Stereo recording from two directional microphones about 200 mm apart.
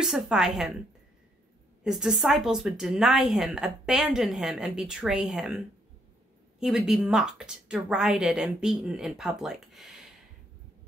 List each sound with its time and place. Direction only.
0.0 s a woman's voice: 5° right (ahead or behind)
1.8 s a woman's voice: centre (ahead or behind)
6.6 s a woman's voice: 5° right (ahead or behind)